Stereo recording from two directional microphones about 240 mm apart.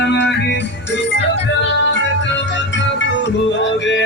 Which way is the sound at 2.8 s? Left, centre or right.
Left.